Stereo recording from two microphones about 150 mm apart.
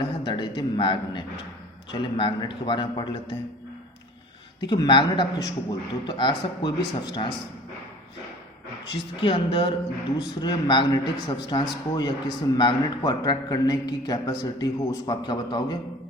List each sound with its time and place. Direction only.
0.3 s a sound: 30° left (ahead or behind)
1.9 s a man's voice: 35° left (ahead or behind)
4.6 s a man's voice: 30° left (ahead or behind)
9.2 s a man's voice: 35° left (ahead or behind)